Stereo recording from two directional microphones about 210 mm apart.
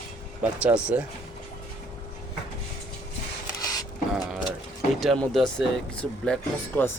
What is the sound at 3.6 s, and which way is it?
Printer, 15° left (ahead or behind).